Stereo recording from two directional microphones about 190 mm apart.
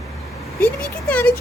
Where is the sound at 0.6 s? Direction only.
10° left (ahead or behind).